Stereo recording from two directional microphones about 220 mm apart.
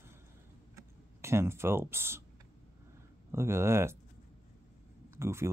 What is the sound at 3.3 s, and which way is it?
Speech, 10° right (ahead or behind).